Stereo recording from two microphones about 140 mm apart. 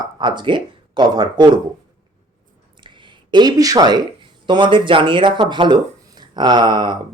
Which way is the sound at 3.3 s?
30° right (ahead or behind).